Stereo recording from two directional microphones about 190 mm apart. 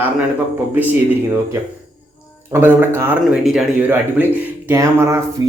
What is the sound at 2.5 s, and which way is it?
Speech, 10° right (ahead or behind).